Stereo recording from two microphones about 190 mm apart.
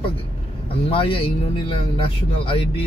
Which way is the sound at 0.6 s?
30° left (ahead or behind).